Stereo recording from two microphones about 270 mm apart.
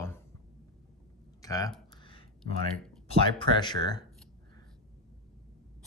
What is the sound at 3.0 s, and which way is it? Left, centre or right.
Speech, centre.